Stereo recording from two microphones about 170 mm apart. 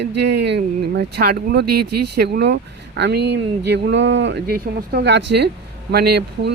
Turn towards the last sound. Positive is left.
turn(degrees=-70)  # may be behind; listen again after turning